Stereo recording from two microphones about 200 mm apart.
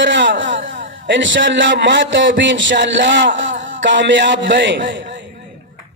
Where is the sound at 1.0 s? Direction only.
65° right (ahead or behind).